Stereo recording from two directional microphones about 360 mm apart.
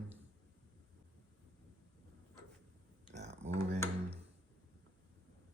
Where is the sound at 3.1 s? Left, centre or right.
Centre.